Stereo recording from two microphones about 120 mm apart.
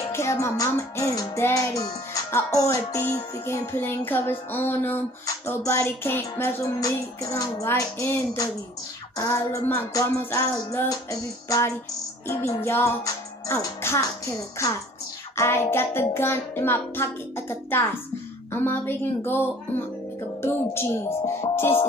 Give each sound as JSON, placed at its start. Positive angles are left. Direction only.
{"t": 0.1, "sound": "music", "side_deg": 25}